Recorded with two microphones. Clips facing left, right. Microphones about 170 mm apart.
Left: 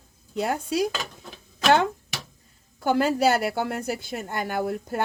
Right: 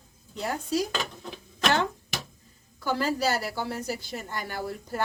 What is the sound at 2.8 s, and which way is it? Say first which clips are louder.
A woman's voice: left 6 dB; 55° left (ahead or behind).